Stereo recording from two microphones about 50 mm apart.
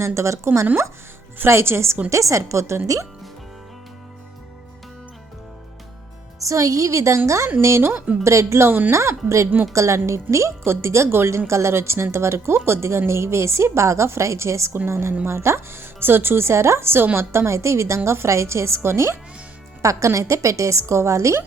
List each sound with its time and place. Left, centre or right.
0.0 s a woman's voice: right
1.5 s a woman's voice: right
2.0 s a woman's voice: right
6.4 s a woman's voice: right
7.3 s a woman's voice: right
7.8 s speech: right
8.2 s a woman's voice: right
10.3 s a woman's voice: right
12.5 s a woman's voice: right
19.8 s a woman's voice: right